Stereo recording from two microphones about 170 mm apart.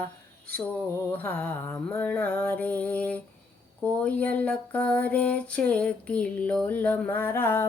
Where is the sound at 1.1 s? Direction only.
10° left (ahead or behind).